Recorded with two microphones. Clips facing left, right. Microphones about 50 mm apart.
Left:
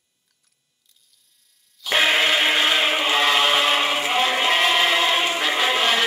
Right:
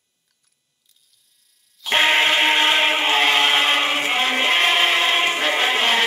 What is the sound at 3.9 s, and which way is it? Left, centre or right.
Music, right.